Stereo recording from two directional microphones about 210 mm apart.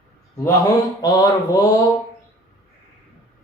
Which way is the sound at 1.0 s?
15° left (ahead or behind).